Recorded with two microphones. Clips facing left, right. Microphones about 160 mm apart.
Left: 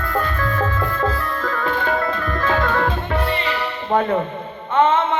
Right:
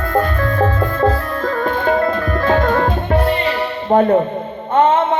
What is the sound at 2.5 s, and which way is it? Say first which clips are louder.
Music: right 5 dB; 40° right (ahead or behind).